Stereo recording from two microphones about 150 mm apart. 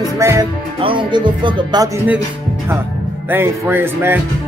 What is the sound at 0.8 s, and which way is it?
Speech, 35° right (ahead or behind).